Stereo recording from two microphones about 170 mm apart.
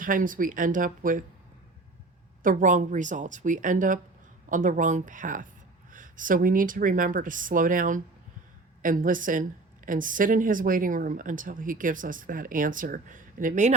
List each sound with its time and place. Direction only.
0.0 s a woman's voice: 55° right (ahead or behind)
2.4 s a woman's voice: 50° right (ahead or behind)